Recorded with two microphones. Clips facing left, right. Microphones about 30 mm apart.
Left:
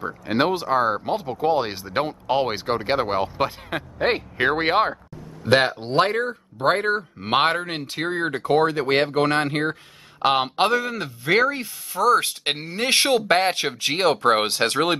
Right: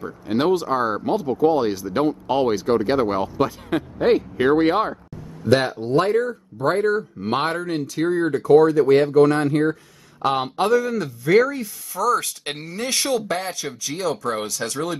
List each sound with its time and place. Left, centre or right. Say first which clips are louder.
0.0 s speech: even; left
1.1 s speech: right 3 dB; left
5.5 s speech: right 1 dB; left